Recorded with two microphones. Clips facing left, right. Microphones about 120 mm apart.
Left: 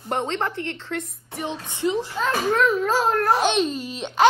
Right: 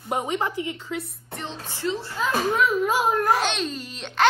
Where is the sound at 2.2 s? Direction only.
5° right (ahead or behind).